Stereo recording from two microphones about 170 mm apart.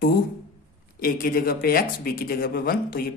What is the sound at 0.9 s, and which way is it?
Speech, 60° left (ahead or behind).